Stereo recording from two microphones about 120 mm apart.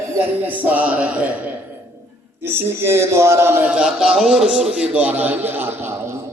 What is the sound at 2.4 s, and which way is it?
A man's voice, 20° right (ahead or behind).